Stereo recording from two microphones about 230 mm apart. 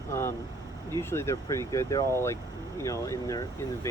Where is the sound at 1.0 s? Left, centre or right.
Centre.